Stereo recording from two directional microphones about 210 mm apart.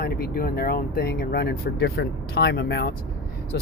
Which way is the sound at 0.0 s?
45° left (ahead or behind).